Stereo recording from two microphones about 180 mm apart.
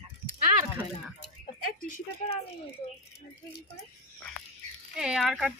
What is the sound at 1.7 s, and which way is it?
Speech, 50° left (ahead or behind).